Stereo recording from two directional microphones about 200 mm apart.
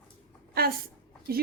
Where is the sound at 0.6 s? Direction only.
50° right (ahead or behind).